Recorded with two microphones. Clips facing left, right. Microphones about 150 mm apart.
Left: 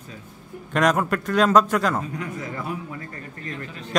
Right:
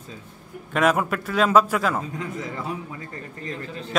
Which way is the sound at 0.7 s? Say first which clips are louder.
Even; 5° right (ahead or behind).